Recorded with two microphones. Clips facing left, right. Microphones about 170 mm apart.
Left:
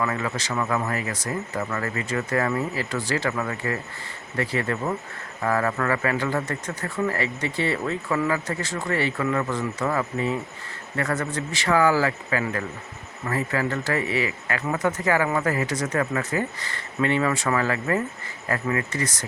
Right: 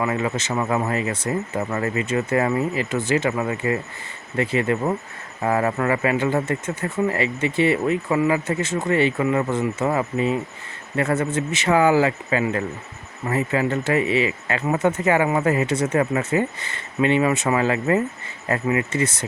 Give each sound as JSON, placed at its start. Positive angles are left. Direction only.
{"t": 0.0, "sound": "speech", "side_deg": -20}